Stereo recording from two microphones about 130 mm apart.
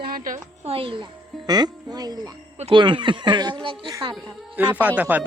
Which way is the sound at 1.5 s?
30° right (ahead or behind).